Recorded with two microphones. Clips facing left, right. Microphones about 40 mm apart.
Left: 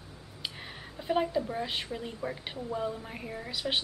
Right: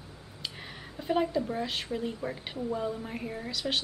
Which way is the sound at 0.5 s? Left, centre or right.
Centre.